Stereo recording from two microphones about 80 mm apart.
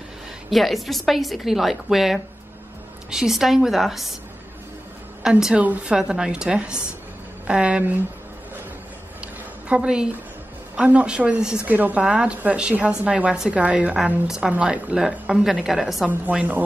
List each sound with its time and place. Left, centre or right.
0.5 s a woman's voice: centre
5.2 s a woman's voice: centre
9.7 s a woman's voice: centre
11.6 s a woman's voice: right; by 16.1 s centre
16.1 s a woman's voice: centre